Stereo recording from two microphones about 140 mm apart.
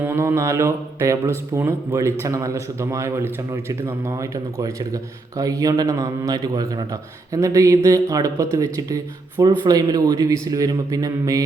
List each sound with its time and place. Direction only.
0.0 s a man's voice: 20° right (ahead or behind)